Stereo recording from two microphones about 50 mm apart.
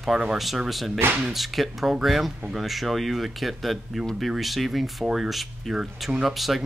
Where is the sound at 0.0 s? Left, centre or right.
Centre.